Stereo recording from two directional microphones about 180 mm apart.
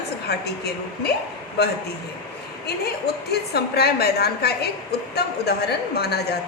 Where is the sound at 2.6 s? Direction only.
65° left (ahead or behind).